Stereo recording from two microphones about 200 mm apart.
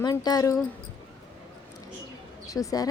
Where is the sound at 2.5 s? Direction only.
15° left (ahead or behind).